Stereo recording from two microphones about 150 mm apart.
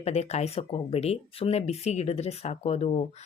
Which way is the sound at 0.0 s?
45° left (ahead or behind).